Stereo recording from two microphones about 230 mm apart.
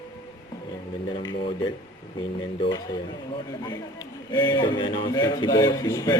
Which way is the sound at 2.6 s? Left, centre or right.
Centre.